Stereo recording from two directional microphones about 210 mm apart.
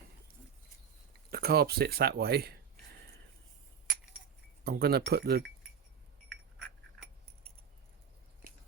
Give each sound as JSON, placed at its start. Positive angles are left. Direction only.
{"t": 1.3, "sound": "speech", "side_deg": -45}
{"t": 4.6, "sound": "speech", "side_deg": -50}